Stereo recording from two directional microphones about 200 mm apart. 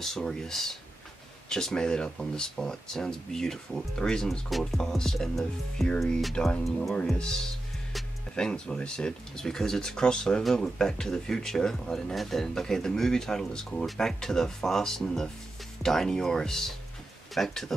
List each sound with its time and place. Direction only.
0.0 s speech: centre (ahead or behind)